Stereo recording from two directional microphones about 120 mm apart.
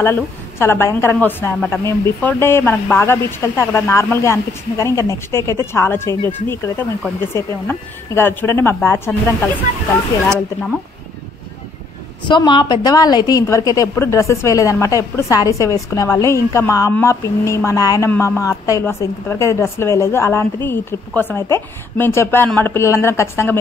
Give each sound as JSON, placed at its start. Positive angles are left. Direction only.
{"t": 0.0, "sound": "speech", "side_deg": 20}
{"t": 12.3, "sound": "speech", "side_deg": 40}
{"t": 18.1, "sound": "a woman's voice", "side_deg": 15}
{"t": 18.4, "sound": "speech", "side_deg": 25}